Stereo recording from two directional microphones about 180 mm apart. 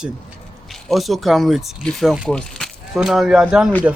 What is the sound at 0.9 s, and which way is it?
Speech, centre (ahead or behind).